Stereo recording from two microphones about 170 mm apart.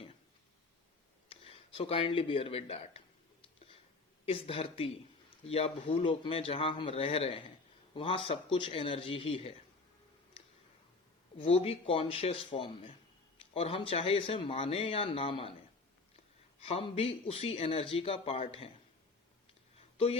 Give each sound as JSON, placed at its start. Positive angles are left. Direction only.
{"t": 1.3, "sound": "speech", "side_deg": 35}
{"t": 4.3, "sound": "speech", "side_deg": 35}
{"t": 11.3, "sound": "speech", "side_deg": 35}
{"t": 16.6, "sound": "speech", "side_deg": 35}